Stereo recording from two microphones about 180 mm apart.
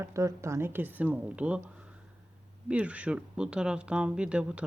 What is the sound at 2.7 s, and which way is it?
Speech, 5° right (ahead or behind).